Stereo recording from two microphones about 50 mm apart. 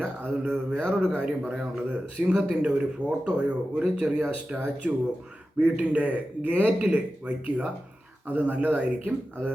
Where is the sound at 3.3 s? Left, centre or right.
Right.